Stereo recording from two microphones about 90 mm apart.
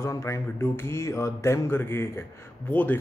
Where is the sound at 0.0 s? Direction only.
30° left (ahead or behind).